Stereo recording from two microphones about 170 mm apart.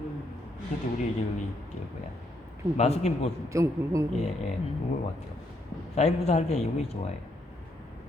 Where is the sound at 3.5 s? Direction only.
20° right (ahead or behind).